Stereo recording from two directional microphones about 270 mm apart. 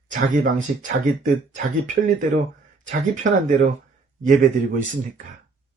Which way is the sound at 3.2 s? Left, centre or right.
Right.